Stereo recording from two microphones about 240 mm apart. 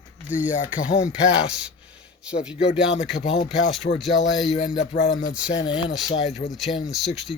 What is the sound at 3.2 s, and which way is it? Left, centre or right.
Speech, left.